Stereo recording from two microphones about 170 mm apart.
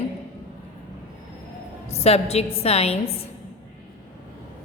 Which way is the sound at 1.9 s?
40° left (ahead or behind).